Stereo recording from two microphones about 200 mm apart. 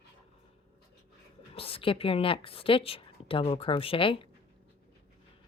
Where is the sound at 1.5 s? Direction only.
25° left (ahead or behind).